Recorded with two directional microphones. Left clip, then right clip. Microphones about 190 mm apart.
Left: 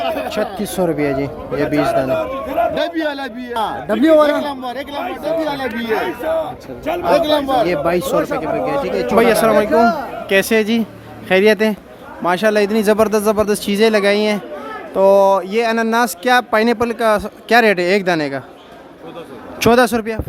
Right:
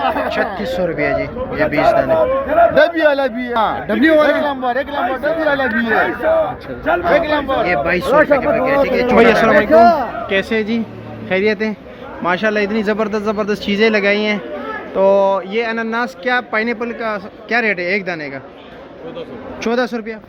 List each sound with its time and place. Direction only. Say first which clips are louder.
0.0 s a sound: right 3 dB; 25° right (ahead or behind)
0.6 s speech: right 1 dB; 30° left (ahead or behind)
2.7 s a man's voice: right 8 dB; 30° right (ahead or behind)
3.5 s speech: right 3 dB; 10° right (ahead or behind)
3.8 s speech: left 2 dB; 15° left (ahead or behind)
4.3 s speech: right 3 dB; 10° right (ahead or behind)
7.2 s a man's voice: left 1 dB; 65° left (ahead or behind)
7.6 s speech: right 1 dB; 25° left (ahead or behind)
9.8 s speech: right 5 dB; 40° right (ahead or behind)
10.2 s speech: left 7 dB; 25° left (ahead or behind)
19.5 s speech: left 6 dB; 40° left (ahead or behind)